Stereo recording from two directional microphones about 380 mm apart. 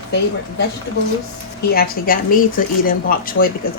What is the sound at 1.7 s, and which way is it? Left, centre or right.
Speech, left.